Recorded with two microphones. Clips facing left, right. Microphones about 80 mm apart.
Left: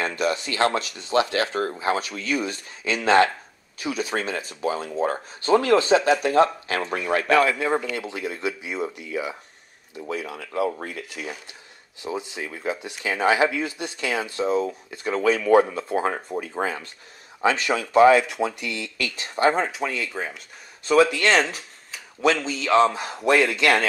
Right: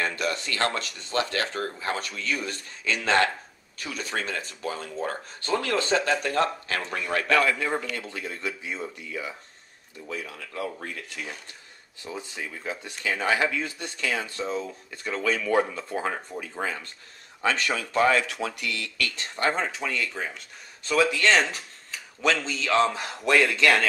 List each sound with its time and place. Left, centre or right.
0.0 s speech: centre
10.9 s speech: centre
16.3 s speech: left
17.4 s speech: centre